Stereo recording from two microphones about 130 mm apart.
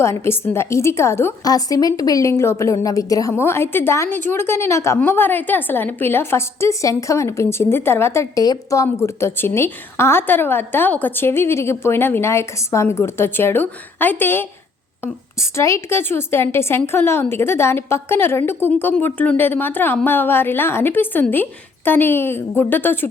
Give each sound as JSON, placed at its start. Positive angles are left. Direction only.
{"t": 0.0, "sound": "a woman's voice", "side_deg": 20}